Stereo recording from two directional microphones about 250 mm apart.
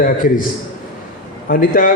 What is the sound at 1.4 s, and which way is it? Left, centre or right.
Speech, left.